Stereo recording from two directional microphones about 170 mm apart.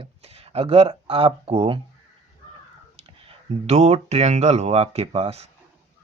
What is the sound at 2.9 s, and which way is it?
Speech, 35° right (ahead or behind).